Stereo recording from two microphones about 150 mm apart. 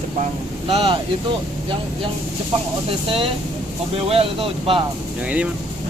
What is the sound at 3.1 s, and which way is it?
Speech, 35° right (ahead or behind).